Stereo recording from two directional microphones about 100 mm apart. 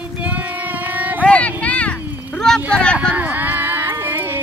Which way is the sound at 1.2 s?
10° left (ahead or behind).